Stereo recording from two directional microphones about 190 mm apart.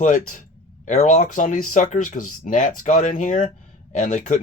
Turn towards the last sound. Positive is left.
turn(degrees=40)  # may be behind; listen again after turning